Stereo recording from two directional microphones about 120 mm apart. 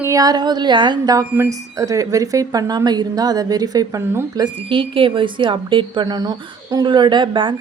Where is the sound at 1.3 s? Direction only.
25° right (ahead or behind).